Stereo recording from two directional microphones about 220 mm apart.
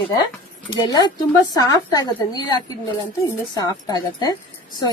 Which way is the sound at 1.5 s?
15° left (ahead or behind).